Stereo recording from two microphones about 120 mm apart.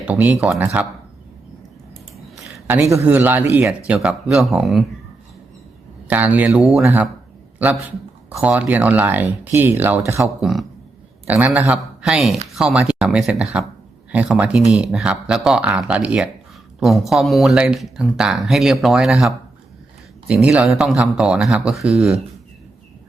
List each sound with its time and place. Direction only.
0.2 s speech: 15° right (ahead or behind)
2.9 s speech: 20° right (ahead or behind)
3.8 s speech: 5° right (ahead or behind)
6.1 s speech: 10° right (ahead or behind)
10.4 s speech: centre (ahead or behind)
11.3 s speech: 15° right (ahead or behind)
11.8 s speech: centre (ahead or behind)